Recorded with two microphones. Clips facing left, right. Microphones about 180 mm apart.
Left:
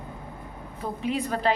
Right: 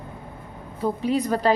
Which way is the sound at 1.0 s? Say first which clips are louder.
Right 3 dB; 40° right (ahead or behind).